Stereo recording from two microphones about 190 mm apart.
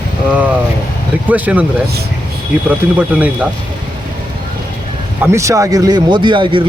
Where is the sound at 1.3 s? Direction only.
10° right (ahead or behind).